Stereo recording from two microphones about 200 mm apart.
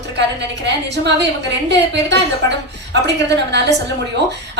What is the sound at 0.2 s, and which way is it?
A woman's voice, 60° right (ahead or behind).